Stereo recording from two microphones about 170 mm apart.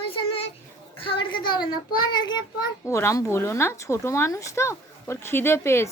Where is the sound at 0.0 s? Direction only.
35° left (ahead or behind).